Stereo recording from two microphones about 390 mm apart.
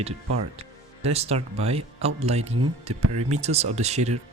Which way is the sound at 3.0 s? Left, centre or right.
Right.